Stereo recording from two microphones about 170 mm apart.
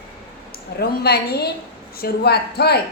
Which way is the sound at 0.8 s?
70° left (ahead or behind).